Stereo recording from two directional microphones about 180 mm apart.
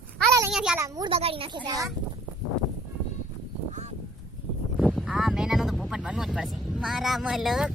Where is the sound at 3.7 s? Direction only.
40° right (ahead or behind).